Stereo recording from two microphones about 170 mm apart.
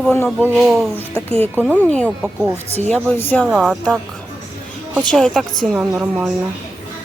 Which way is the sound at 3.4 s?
Centre (ahead or behind).